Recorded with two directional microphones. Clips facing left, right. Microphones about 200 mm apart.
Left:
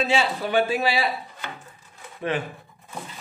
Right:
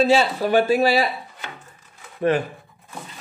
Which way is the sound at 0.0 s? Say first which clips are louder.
Right 6 dB; 40° right (ahead or behind).